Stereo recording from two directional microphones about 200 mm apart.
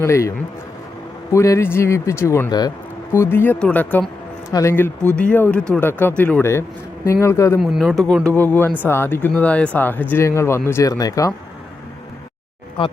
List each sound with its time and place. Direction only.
0.0 s speech: 15° left (ahead or behind)
7.6 s speech: centre (ahead or behind); by 11.3 s 15° left (ahead or behind)
12.8 s speech: 25° left (ahead or behind)